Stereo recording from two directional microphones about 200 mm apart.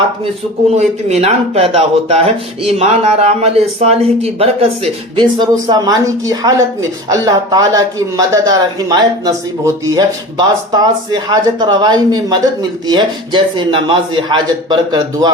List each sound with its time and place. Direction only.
0.8 s speech: 35° right (ahead or behind)